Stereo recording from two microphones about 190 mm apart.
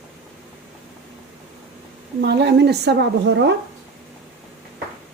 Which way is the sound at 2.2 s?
60° right (ahead or behind).